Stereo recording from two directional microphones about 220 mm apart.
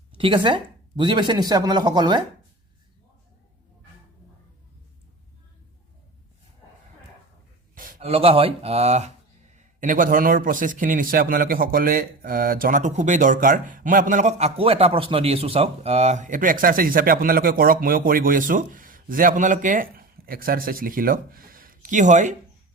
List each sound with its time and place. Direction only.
0.2 s speech: 25° right (ahead or behind)
7.8 s speech: 35° right (ahead or behind)